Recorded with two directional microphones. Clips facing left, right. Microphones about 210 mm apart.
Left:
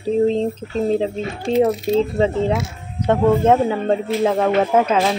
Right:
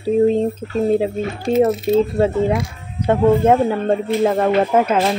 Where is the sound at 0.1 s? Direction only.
10° right (ahead or behind).